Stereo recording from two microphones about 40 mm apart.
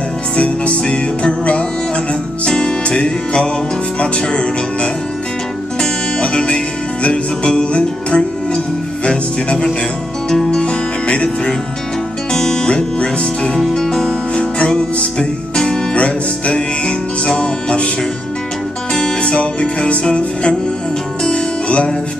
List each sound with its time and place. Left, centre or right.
0.4 s music: left
4.0 s speech: left
6.1 s music: left
10.3 s music: centre
10.6 s music: left
12.3 s music: centre
13.6 s music: centre
14.3 s music: left
19.2 s music: left